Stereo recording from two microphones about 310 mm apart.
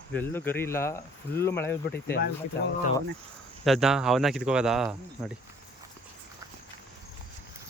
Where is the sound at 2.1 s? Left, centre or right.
Left.